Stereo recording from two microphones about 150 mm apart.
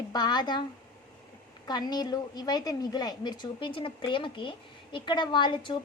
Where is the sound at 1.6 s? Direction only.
25° left (ahead or behind).